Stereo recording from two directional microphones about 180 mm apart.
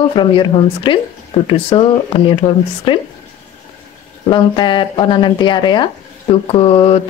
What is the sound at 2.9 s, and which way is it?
Speech, 30° left (ahead or behind).